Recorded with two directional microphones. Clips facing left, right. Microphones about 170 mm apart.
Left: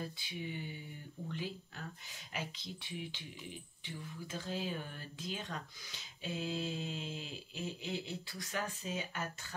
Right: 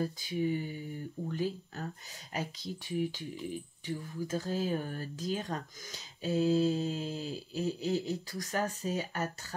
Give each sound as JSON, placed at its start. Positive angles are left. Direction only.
{"t": 0.0, "sound": "speech", "side_deg": -40}